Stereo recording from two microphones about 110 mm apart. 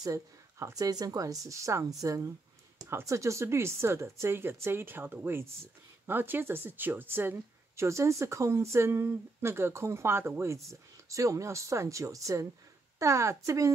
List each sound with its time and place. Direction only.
0.0 s speech: 30° right (ahead or behind)